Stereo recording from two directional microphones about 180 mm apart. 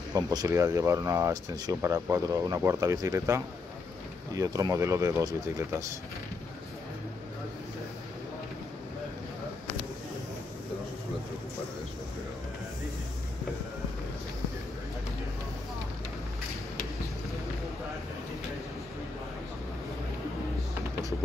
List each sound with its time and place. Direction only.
0.1 s speech: 20° right (ahead or behind)